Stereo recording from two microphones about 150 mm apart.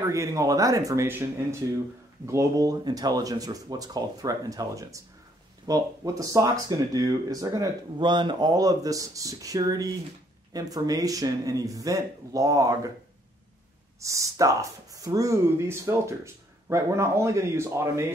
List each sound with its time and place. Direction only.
0.1 s speech: 20° right (ahead or behind)
14.0 s a man's voice: 20° right (ahead or behind)